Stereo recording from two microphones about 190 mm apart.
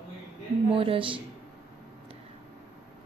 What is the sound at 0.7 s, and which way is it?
Speech, 30° right (ahead or behind).